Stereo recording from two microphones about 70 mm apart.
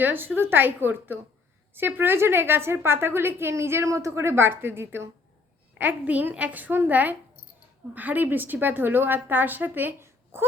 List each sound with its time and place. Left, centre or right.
0.0 s a woman's voice: right